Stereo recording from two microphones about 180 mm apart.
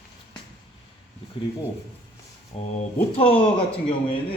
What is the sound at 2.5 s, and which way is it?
Speech, 35° left (ahead or behind).